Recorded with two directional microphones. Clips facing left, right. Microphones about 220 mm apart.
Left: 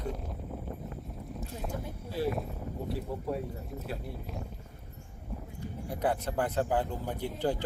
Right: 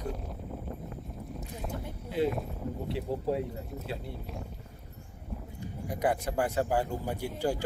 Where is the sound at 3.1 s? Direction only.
30° right (ahead or behind).